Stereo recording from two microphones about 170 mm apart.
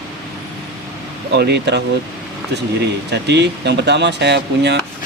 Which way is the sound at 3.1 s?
90° right.